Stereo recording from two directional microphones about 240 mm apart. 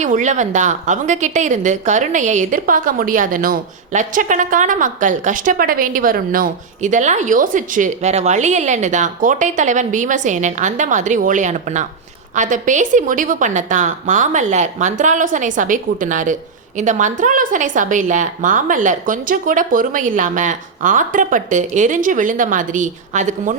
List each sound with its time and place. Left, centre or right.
0.0 s a woman's voice: right